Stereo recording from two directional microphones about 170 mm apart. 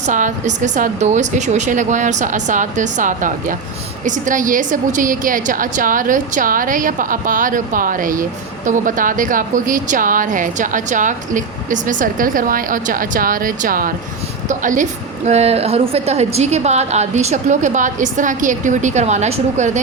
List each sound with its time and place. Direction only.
0.1 s a woman's voice: 50° right (ahead or behind)
15.3 s a woman's voice: 40° right (ahead or behind)